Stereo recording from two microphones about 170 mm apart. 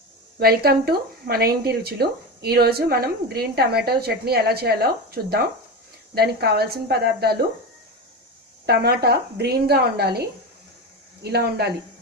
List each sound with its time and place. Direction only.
0.3 s speech: 65° right (ahead or behind)
8.6 s speech: 70° right (ahead or behind)